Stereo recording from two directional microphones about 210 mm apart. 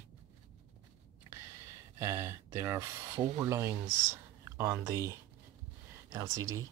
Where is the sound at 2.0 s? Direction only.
10° right (ahead or behind).